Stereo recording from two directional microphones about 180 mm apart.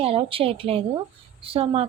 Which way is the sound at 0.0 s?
30° right (ahead or behind).